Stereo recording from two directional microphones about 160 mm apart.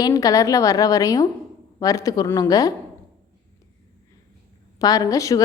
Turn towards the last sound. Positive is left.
turn(degrees=20)  # may be behind; listen again after turning